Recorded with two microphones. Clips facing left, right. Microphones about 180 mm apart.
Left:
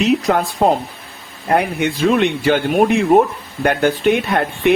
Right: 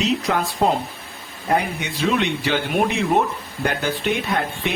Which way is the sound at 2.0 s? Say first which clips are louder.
Left 5 dB; 50° left (ahead or behind).